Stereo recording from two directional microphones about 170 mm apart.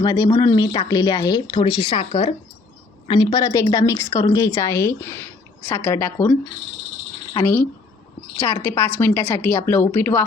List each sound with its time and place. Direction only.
0.0 s a woman's voice: 20° left (ahead or behind)
8.4 s a woman's voice: 15° left (ahead or behind)